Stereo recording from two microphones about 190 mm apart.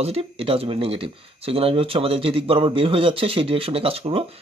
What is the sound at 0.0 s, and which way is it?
Speech, 30° right (ahead or behind).